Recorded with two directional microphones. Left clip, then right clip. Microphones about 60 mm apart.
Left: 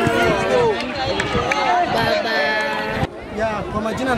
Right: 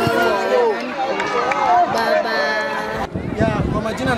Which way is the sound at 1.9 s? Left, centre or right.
Right.